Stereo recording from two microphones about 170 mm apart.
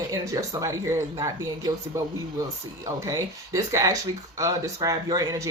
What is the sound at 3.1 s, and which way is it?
Speech, 20° right (ahead or behind).